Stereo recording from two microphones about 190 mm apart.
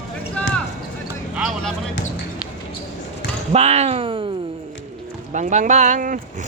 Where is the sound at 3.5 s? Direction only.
35° right (ahead or behind).